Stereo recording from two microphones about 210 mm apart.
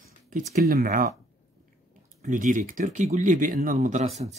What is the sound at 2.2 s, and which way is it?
Speech, 40° right (ahead or behind).